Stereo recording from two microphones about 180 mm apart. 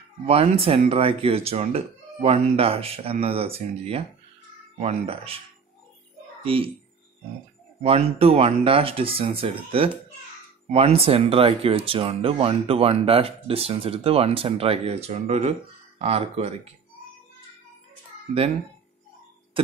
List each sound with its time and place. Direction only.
0.3 s speech: 35° right (ahead or behind)
6.4 s speech: 30° right (ahead or behind)
7.8 s speech: 30° right (ahead or behind)
19.6 s tick-tock: 30° right (ahead or behind)